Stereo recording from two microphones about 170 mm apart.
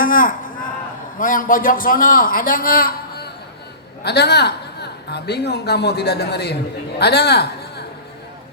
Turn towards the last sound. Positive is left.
turn(degrees=75)  # may be behind; listen again after turning